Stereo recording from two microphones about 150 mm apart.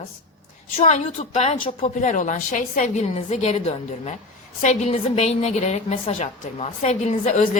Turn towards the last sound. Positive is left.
turn(degrees=50)  # may be behind; listen again after turning